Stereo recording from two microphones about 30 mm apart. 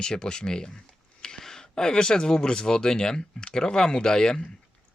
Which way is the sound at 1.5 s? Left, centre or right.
Left.